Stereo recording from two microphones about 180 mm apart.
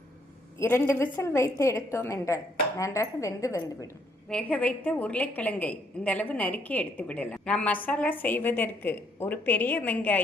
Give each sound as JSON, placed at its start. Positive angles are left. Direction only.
{"t": 0.6, "sound": "a woman's voice", "side_deg": 15}
{"t": 4.3, "sound": "a woman's voice", "side_deg": 5}